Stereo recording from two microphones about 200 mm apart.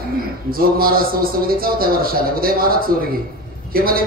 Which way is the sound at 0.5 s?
45° right (ahead or behind).